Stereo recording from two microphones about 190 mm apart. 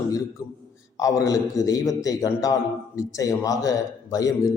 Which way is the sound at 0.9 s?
15° left (ahead or behind).